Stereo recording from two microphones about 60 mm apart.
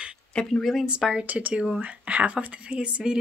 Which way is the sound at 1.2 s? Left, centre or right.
Right.